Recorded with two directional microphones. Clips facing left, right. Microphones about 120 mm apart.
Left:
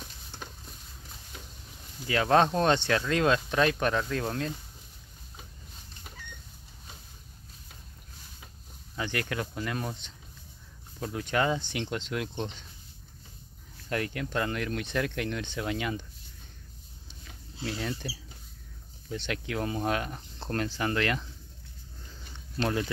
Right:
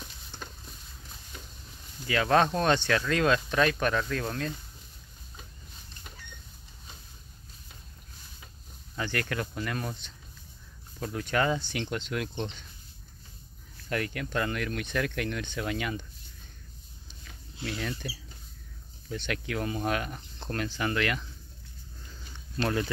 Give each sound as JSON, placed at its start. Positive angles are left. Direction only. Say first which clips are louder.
{"t": 0.0, "sound": "a sound", "louder": "even", "side_deg": 10}
{"t": 2.0, "sound": "speech", "louder": "left 1 dB", "side_deg": 25}
{"t": 8.9, "sound": "speech", "louder": "even", "side_deg": 15}
{"t": 13.8, "sound": "speech", "louder": "even", "side_deg": 25}
{"t": 17.6, "sound": "speech", "louder": "left 1 dB", "side_deg": 30}